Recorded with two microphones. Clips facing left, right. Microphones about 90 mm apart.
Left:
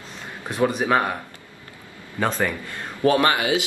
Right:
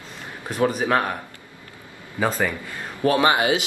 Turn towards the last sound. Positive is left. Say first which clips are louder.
# right 1 dB
turn(degrees=-20)  # may be behind; listen again after turning